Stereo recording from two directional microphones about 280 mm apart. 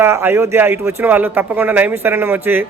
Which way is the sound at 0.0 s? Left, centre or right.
Centre.